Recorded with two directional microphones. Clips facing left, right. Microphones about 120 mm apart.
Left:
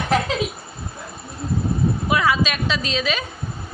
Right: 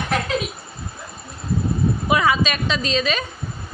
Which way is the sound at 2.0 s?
Centre (ahead or behind).